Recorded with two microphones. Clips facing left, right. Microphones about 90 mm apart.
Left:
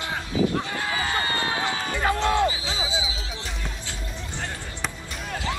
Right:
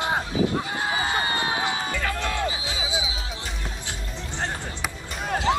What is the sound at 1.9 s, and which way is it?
Music, 25° left (ahead or behind).